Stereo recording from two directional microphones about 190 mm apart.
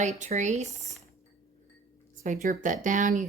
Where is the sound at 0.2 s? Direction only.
40° right (ahead or behind).